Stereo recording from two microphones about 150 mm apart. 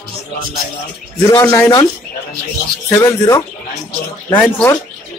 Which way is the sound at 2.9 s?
20° left (ahead or behind).